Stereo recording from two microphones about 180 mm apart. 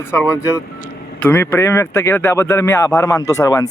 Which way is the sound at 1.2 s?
15° left (ahead or behind).